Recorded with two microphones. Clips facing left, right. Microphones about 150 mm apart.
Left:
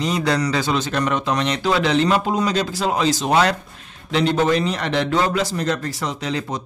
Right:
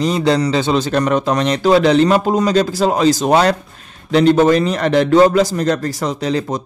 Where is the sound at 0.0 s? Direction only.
30° right (ahead or behind).